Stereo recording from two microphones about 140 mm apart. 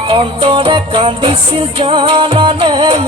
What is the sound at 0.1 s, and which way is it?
Music, 40° right (ahead or behind).